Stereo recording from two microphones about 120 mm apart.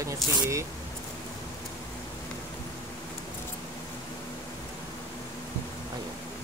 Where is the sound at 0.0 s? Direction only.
25° right (ahead or behind).